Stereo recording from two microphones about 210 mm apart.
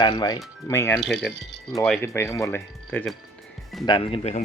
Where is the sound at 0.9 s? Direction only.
Centre (ahead or behind).